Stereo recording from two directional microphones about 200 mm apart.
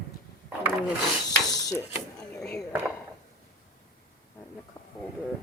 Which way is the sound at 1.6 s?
15° left (ahead or behind).